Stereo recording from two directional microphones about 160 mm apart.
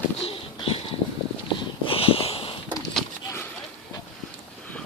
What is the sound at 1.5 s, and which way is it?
Walk, 35° left (ahead or behind).